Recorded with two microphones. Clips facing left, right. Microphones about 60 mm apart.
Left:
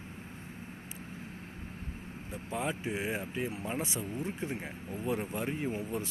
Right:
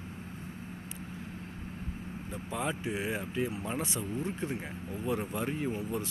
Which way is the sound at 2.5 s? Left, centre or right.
Left.